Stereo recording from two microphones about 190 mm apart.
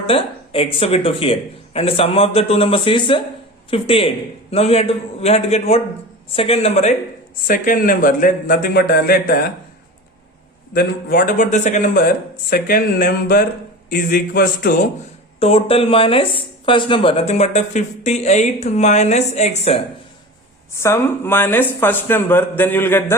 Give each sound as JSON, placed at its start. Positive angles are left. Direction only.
{"t": 0.1, "sound": "speech", "side_deg": 30}
{"t": 7.4, "sound": "speech", "side_deg": 45}
{"t": 10.8, "sound": "speech", "side_deg": 50}
{"t": 15.4, "sound": "speech", "side_deg": 30}
{"t": 20.7, "sound": "speech", "side_deg": 15}